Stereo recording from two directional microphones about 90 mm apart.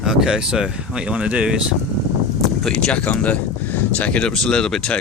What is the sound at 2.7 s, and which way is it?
Speech, 15° left (ahead or behind).